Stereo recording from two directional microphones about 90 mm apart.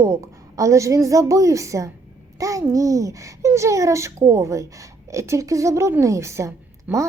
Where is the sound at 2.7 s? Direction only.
40° right (ahead or behind).